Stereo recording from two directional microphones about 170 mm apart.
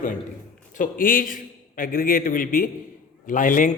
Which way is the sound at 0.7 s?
50° left (ahead or behind).